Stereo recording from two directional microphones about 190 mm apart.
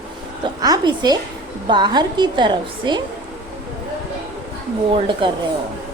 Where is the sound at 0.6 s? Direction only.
20° right (ahead or behind).